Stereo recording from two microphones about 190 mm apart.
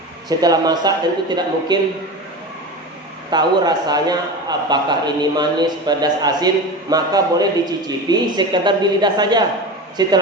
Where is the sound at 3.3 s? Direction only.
20° right (ahead or behind).